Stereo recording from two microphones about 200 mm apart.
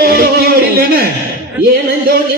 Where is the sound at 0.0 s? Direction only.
50° right (ahead or behind).